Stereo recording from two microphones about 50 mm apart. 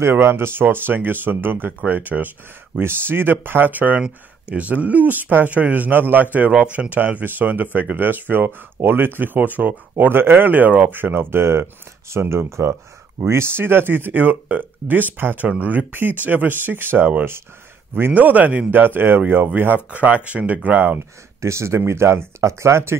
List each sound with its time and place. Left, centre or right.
0.0 s speech: right
2.8 s speech: right
18.1 s speech: right
18.7 s speech: right
21.4 s speech: right